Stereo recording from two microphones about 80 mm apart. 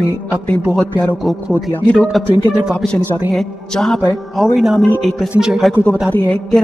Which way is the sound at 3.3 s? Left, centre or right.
Centre.